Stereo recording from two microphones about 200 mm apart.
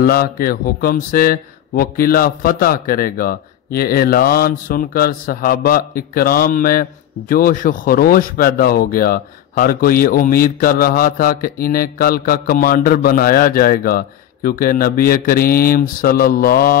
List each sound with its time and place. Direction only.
0.0 s speech: 50° left (ahead or behind)